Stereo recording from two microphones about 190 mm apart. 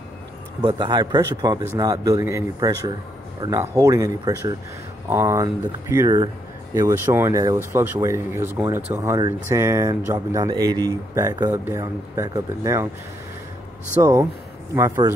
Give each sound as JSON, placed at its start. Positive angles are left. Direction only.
{"t": 0.6, "sound": "a man's voice", "side_deg": -25}
{"t": 14.0, "sound": "a man's voice", "side_deg": -20}